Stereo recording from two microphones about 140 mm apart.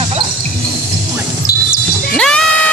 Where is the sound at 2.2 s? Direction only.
5° left (ahead or behind).